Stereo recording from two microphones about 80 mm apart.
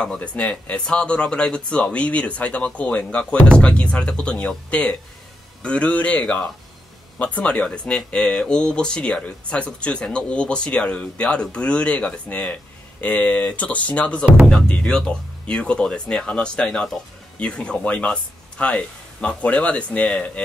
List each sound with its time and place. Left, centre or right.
0.0 s speech: centre